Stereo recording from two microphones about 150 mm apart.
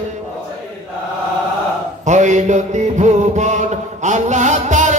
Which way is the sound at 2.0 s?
55° right (ahead or behind).